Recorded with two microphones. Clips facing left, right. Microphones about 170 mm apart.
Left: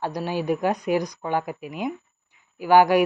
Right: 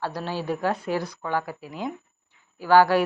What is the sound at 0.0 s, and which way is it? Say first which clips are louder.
Speech: left 3 dB; 15° left (ahead or behind).